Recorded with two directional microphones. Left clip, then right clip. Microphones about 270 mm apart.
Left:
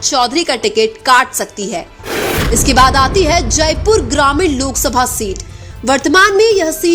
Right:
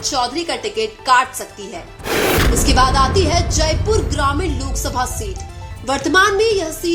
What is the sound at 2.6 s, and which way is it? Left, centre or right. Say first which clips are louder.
A woman's voice: left 7 dB; left.